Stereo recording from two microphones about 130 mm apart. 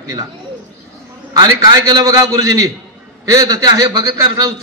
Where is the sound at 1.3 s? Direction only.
30° right (ahead or behind).